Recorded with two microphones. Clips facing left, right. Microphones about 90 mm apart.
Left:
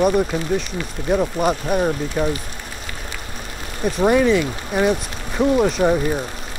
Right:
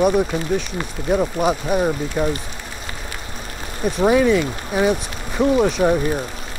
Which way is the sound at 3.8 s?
Centre (ahead or behind).